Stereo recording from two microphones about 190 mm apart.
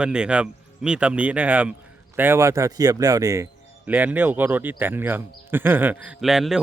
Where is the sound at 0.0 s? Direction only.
5° right (ahead or behind).